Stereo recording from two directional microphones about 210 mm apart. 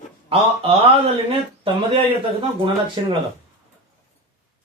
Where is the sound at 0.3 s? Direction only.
30° right (ahead or behind).